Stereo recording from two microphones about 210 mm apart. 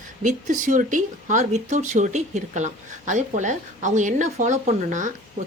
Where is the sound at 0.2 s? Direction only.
40° right (ahead or behind).